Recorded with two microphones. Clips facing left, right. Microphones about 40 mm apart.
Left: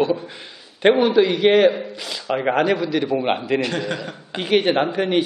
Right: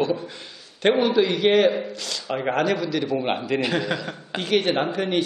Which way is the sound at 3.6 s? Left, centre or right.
Centre.